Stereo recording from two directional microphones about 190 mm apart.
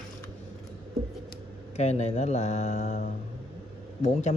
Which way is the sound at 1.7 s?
35° left (ahead or behind).